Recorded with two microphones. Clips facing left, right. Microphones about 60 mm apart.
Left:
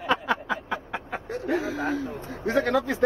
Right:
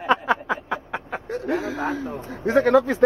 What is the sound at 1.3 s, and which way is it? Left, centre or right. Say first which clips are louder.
Speech: right 2 dB; centre.